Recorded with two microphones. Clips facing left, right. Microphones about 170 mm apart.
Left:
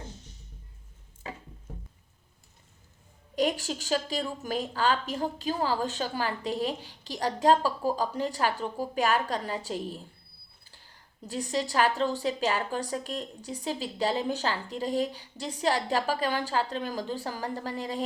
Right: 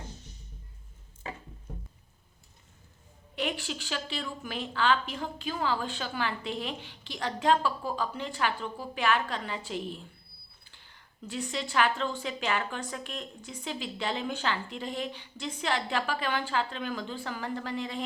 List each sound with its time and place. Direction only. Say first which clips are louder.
3.3 s a woman's voice: left 5 dB; 40° left (ahead or behind)